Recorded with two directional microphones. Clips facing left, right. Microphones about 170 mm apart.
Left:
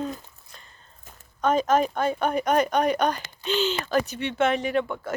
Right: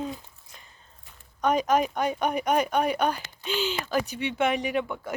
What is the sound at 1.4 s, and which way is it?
Speech, 10° right (ahead or behind).